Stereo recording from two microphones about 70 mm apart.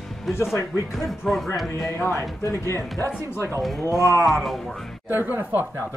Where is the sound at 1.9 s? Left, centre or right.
Left.